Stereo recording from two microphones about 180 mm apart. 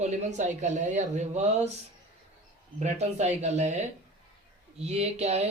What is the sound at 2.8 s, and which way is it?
Speech, 40° right (ahead or behind).